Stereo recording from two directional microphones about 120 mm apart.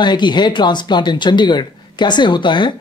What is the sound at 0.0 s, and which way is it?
Speech, 40° left (ahead or behind).